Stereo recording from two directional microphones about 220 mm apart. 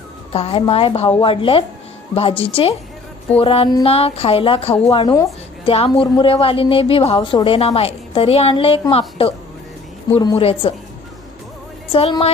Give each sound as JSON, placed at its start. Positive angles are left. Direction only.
{"t": 0.3, "sound": "a woman's voice", "side_deg": 25}
{"t": 11.9, "sound": "a woman's voice", "side_deg": 25}